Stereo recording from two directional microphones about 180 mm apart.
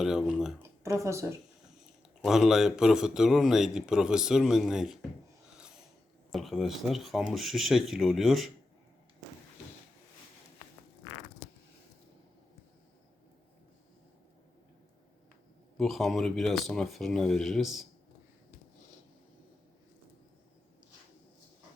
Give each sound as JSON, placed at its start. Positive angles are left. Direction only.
{"t": 0.0, "sound": "a man's voice", "side_deg": -5}
{"t": 0.6, "sound": "speech", "side_deg": -15}
{"t": 2.2, "sound": "a man's voice", "side_deg": 0}
{"t": 6.3, "sound": "a man's voice", "side_deg": 0}
{"t": 15.8, "sound": "a man's voice", "side_deg": 0}